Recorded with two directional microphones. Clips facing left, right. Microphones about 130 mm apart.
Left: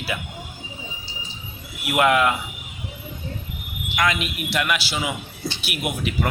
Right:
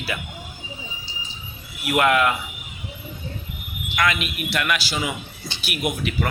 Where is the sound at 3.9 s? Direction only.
20° left (ahead or behind).